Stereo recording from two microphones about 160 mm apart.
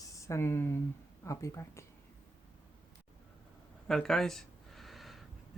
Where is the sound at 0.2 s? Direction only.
15° left (ahead or behind).